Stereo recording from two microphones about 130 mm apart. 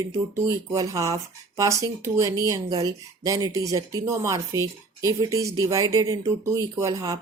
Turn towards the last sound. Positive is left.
turn(degrees=-25)  # may be behind; listen again after turning